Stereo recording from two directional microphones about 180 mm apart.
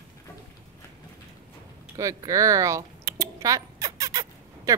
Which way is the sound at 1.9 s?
15° right (ahead or behind).